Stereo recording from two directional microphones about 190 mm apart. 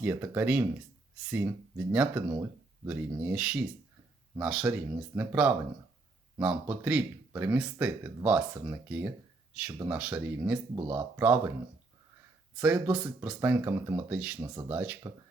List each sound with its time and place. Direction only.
0.0 s speech: 10° right (ahead or behind)
12.5 s speech: 5° right (ahead or behind)
14.4 s speech: 20° right (ahead or behind)
14.7 s speech: 10° right (ahead or behind)